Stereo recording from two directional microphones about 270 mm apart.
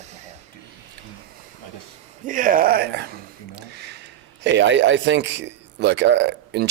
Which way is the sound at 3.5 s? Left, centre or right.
Right.